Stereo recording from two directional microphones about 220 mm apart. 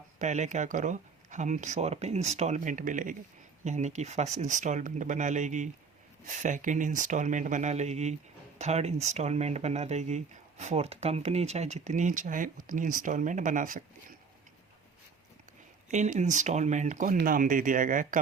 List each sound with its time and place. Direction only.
0.2 s speech: 35° right (ahead or behind)
15.9 s speech: 35° right (ahead or behind)